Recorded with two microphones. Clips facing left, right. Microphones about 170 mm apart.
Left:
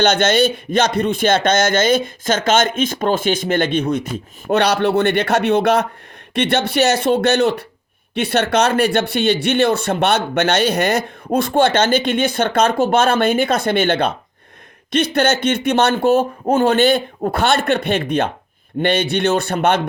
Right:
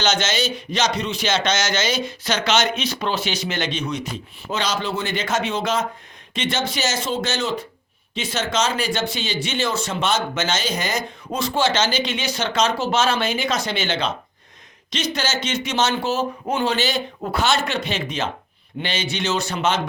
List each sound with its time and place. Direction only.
0.0 s speech: 55° left (ahead or behind)